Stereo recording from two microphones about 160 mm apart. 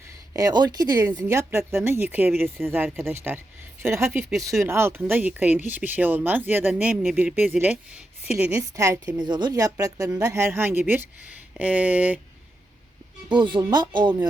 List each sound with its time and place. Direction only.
0.3 s a woman's voice: 25° right (ahead or behind); by 12.2 s 10° right (ahead or behind)
13.2 s a woman's voice: 30° right (ahead or behind)